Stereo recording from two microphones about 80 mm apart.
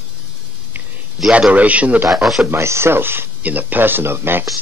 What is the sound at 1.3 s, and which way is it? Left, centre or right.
Speech, centre.